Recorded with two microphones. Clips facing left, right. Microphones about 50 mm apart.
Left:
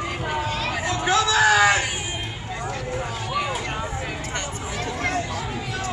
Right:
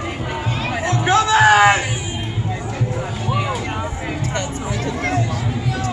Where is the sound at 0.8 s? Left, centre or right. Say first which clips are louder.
Right 5 dB; right.